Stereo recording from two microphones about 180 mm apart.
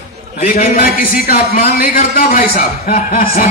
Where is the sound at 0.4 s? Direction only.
50° left (ahead or behind).